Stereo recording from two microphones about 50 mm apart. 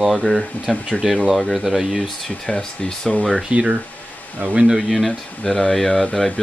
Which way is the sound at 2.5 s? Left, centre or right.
Centre.